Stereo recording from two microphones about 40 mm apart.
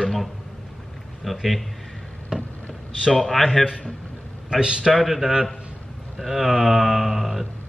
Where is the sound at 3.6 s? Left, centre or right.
Centre.